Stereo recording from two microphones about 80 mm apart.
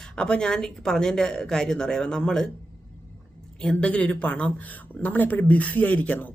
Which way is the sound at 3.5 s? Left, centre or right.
Centre.